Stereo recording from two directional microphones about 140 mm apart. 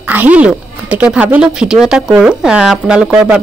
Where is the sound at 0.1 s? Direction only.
10° right (ahead or behind).